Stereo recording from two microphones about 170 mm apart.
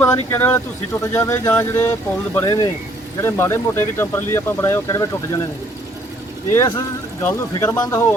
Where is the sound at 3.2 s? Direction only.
15° left (ahead or behind).